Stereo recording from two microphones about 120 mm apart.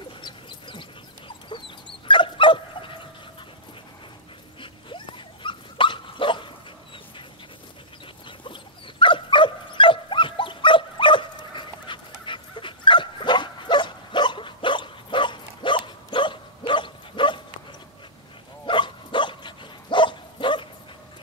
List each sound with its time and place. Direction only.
0.2 s chicken: 40° left (ahead or behind)
1.5 s dog: 45° left (ahead or behind)
4.6 s dog: 45° left (ahead or behind)
9.0 s dog: 45° left (ahead or behind)
18.7 s dog: 40° left (ahead or behind)